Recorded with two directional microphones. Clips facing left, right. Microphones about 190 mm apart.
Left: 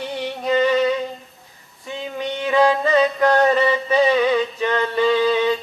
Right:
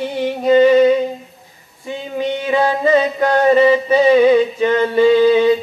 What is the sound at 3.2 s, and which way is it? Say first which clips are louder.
Music: right 7 dB; 20° right (ahead or behind).